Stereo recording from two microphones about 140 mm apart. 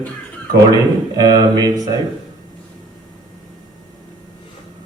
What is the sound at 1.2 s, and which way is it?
Speech, 25° right (ahead or behind).